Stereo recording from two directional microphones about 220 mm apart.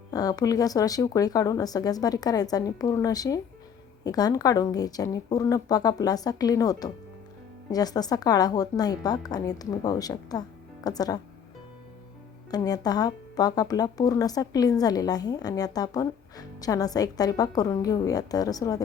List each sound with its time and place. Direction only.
0.1 s speech: 15° left (ahead or behind)
12.5 s speech: 15° left (ahead or behind)